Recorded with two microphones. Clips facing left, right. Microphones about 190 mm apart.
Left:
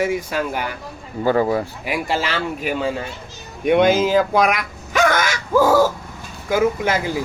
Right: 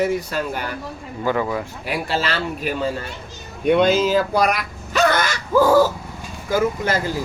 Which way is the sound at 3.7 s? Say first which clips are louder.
Left 1 dB; 55° left (ahead or behind).